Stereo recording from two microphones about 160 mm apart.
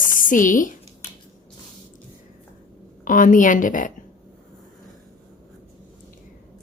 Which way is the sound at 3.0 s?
55° left (ahead or behind).